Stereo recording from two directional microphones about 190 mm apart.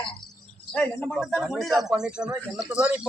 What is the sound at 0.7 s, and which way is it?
Speech, 10° left (ahead or behind).